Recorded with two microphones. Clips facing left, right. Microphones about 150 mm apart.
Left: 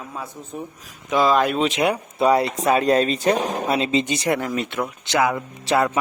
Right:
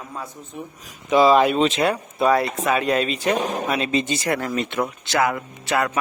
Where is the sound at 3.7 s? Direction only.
25° left (ahead or behind).